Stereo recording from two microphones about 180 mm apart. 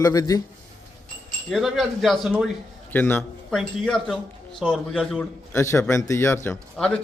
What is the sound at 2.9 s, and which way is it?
A man's voice, 10° left (ahead or behind).